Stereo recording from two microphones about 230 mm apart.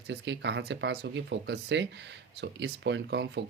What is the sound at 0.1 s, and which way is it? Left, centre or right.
Speech, right.